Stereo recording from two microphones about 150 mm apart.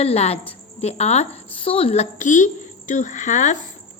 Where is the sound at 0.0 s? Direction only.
45° left (ahead or behind).